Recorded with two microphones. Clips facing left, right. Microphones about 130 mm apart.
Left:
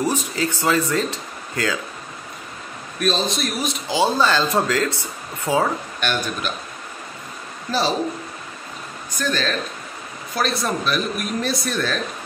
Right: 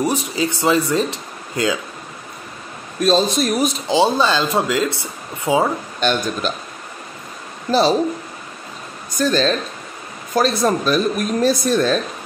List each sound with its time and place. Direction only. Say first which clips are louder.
0.0 s speech: right 2 dB; 15° right (ahead or behind)
3.0 s a man's voice: right 6 dB; 45° right (ahead or behind)
3.9 s speech: right 2 dB; 20° right (ahead or behind)
5.9 s speech: right 5 dB; 30° right (ahead or behind)
9.2 s speech: right 6 dB; 35° right (ahead or behind)